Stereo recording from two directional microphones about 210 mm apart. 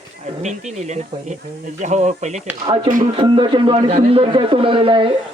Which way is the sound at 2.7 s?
25° right (ahead or behind).